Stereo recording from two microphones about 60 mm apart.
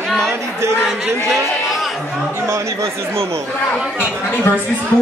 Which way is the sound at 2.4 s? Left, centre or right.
Right.